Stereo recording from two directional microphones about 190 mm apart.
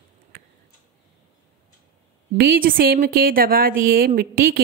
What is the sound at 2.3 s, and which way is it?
Speech, 50° right (ahead or behind).